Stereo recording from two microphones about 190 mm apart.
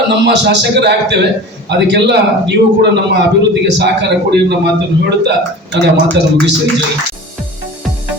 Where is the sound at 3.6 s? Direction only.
65° right (ahead or behind).